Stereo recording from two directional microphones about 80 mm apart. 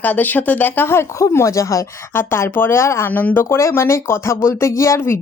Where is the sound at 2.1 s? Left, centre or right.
Left.